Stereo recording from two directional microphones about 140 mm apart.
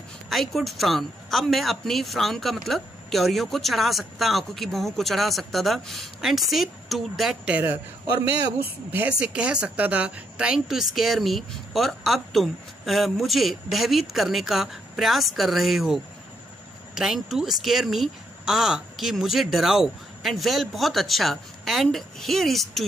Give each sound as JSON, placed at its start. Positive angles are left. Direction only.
{"t": 0.3, "sound": "a woman's voice", "side_deg": 0}
{"t": 8.9, "sound": "a woman's voice", "side_deg": -10}